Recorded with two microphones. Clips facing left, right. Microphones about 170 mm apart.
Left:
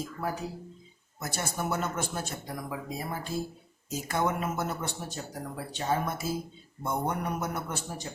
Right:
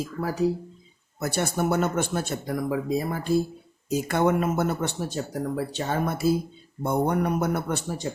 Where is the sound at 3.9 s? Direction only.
65° right (ahead or behind).